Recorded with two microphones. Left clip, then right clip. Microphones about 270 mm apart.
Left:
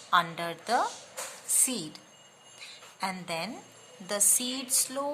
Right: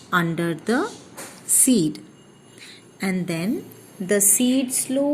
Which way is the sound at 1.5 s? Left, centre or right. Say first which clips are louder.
Right 12 dB; centre.